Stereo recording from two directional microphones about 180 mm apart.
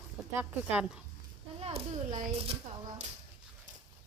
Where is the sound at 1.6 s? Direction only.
35° right (ahead or behind).